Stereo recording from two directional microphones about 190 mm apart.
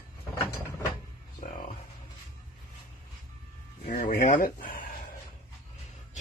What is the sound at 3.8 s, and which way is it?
Speech, 45° left (ahead or behind).